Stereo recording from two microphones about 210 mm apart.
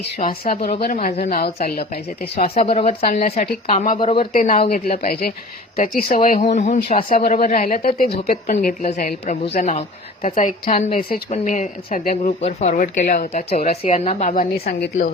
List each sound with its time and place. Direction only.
0.2 s a woman's voice: 35° left (ahead or behind)
2.6 s a woman's voice: 30° left (ahead or behind)
4.7 s a woman's voice: 45° left (ahead or behind)
14.5 s a woman's voice: 45° left (ahead or behind)